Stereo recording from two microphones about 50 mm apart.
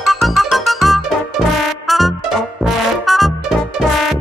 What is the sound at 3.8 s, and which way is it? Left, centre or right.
Music, right.